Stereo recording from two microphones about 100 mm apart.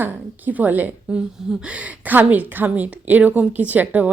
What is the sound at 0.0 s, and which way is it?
A woman's voice, 15° right (ahead or behind).